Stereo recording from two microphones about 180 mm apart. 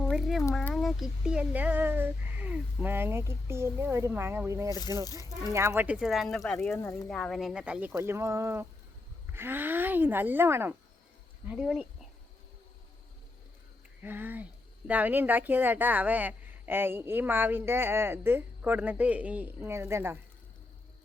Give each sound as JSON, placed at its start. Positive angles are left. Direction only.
{"t": 0.0, "sound": "a sound", "side_deg": 0}
{"t": 0.5, "sound": "speech", "side_deg": 0}
{"t": 6.7, "sound": "speech", "side_deg": 15}
{"t": 7.1, "sound": "speech", "side_deg": 5}
{"t": 14.0, "sound": "speech", "side_deg": -10}